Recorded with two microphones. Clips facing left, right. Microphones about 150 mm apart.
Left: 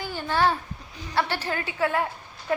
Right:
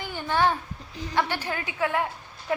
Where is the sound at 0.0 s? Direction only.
20° right (ahead or behind).